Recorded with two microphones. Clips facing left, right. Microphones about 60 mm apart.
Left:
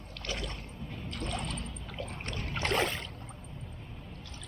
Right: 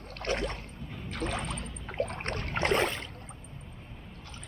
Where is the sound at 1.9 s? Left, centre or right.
Right.